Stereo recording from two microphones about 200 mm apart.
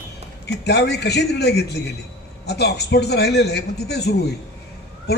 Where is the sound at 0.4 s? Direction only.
55° left (ahead or behind).